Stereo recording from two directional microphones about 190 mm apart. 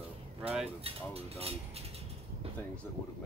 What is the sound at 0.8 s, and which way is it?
Speech, 30° right (ahead or behind).